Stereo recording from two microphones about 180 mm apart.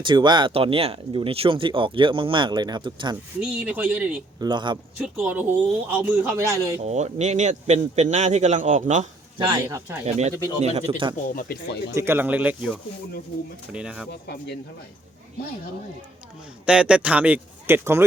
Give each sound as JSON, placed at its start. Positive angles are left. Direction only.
{"t": 0.0, "sound": "speech", "side_deg": -25}
{"t": 3.4, "sound": "a man's voice", "side_deg": -5}
{"t": 4.4, "sound": "speech", "side_deg": -25}
{"t": 4.9, "sound": "a man's voice", "side_deg": -5}
{"t": 6.8, "sound": "a man's voice", "side_deg": -40}
{"t": 9.4, "sound": "a man's voice", "side_deg": -20}
{"t": 10.1, "sound": "a man's voice", "side_deg": -35}
{"t": 11.3, "sound": "speech", "side_deg": 60}
{"t": 11.9, "sound": "a man's voice", "side_deg": -10}
{"t": 13.7, "sound": "speech", "side_deg": -5}
{"t": 16.6, "sound": "a man's voice", "side_deg": -5}